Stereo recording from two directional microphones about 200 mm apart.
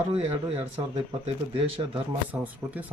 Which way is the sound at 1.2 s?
30° right (ahead or behind).